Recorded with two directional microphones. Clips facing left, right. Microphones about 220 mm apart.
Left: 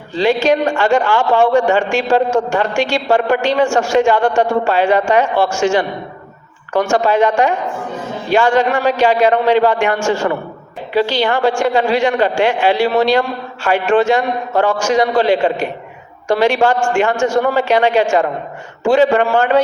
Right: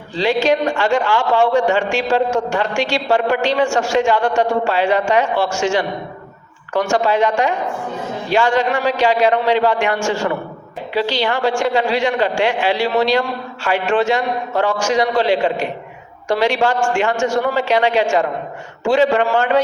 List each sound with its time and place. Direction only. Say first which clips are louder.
0.2 s a man's voice: left 2 dB; 50° left (ahead or behind)
10.9 s a man's voice: left 4 dB; 50° left (ahead or behind)